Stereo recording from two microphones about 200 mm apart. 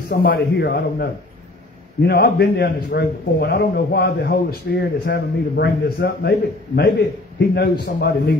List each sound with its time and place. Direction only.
0.1 s a man's voice: 50° left (ahead or behind)